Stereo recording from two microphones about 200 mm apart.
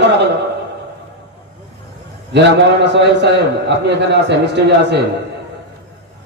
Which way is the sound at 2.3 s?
60° right (ahead or behind).